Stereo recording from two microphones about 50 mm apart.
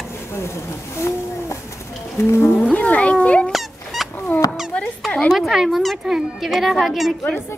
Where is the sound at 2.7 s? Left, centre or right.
Left.